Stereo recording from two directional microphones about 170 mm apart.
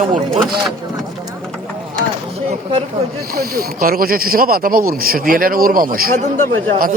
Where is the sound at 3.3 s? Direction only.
60° right (ahead or behind).